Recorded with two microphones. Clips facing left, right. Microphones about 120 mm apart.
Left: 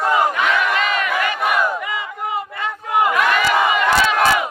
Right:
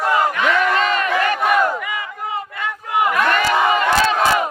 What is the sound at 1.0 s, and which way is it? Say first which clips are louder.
Crowd: right 2 dB; 15° left (ahead or behind).